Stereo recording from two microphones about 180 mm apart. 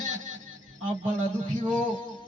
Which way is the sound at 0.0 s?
45° right (ahead or behind).